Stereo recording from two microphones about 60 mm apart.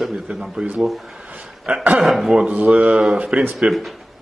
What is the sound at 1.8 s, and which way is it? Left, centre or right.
Speech, right.